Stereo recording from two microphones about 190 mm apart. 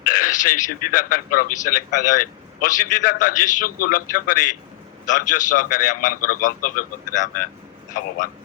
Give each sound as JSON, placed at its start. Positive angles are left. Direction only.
{"t": 0.1, "sound": "a man's voice", "side_deg": 45}